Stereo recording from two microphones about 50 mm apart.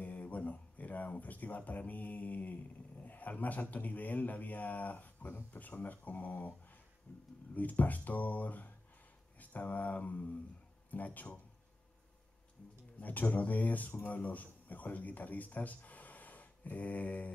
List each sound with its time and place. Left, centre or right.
0.0 s speech: left
13.0 s speech: left